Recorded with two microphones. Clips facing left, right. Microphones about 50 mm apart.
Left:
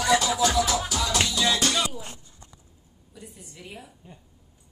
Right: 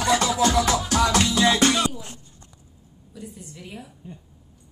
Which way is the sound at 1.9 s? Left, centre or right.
Centre.